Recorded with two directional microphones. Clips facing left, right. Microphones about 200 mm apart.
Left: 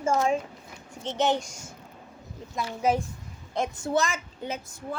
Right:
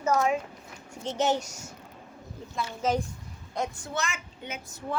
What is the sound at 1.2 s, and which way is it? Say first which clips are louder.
Speech: left 1 dB; 5° right (ahead or behind).